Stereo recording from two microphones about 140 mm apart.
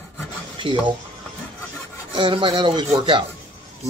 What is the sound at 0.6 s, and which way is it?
Speech, 35° right (ahead or behind).